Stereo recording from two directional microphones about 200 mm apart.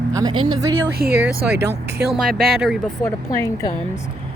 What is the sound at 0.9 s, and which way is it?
Speech, 50° right (ahead or behind).